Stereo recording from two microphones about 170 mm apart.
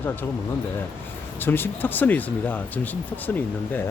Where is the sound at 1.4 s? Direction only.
10° left (ahead or behind).